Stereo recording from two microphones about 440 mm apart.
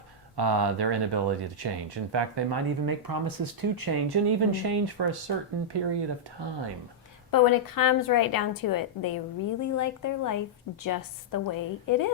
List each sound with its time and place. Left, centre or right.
0.3 s speech: right
7.3 s a woman's voice: left